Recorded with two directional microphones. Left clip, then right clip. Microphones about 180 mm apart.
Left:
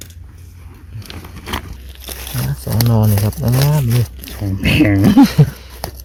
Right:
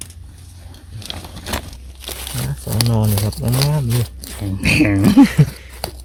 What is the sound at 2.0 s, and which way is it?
Crumpling, 15° left (ahead or behind).